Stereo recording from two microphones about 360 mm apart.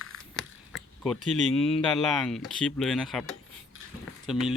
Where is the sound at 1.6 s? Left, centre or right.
Centre.